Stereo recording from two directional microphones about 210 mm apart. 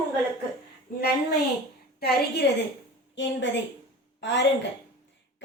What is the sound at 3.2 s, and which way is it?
A woman's voice, 60° left (ahead or behind).